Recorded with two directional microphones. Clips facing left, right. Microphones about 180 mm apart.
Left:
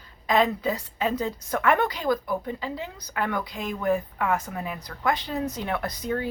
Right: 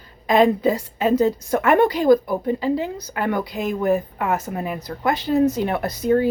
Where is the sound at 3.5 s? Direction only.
45° right (ahead or behind).